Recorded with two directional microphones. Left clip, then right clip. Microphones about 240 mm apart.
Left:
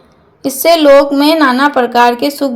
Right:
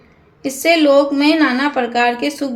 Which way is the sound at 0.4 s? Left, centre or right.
Centre.